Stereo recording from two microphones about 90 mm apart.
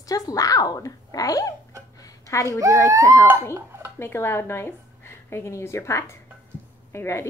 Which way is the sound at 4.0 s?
25° left (ahead or behind).